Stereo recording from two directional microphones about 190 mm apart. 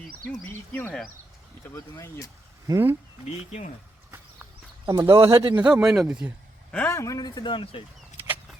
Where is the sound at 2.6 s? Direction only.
15° right (ahead or behind).